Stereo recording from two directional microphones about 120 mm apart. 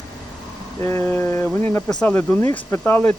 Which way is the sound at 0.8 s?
20° left (ahead or behind).